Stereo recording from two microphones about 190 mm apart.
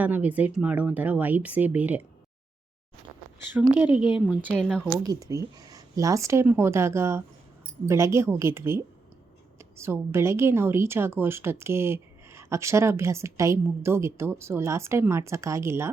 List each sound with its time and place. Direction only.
0.0 s a woman's voice: 10° right (ahead or behind)
3.8 s a woman's voice: 10° right (ahead or behind)
4.5 s speech: 5° left (ahead or behind)
5.0 s a woman's voice: 20° right (ahead or behind)